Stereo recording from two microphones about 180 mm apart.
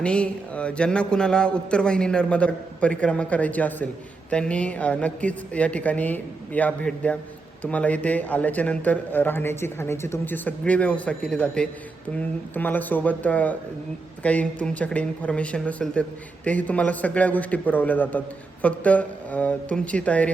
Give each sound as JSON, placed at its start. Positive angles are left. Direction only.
{"t": 0.0, "sound": "a man's voice", "side_deg": 5}